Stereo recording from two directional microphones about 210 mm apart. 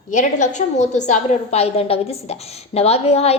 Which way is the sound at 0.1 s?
35° left (ahead or behind).